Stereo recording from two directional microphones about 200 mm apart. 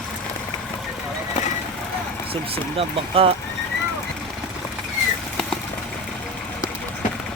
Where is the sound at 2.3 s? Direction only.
30° right (ahead or behind).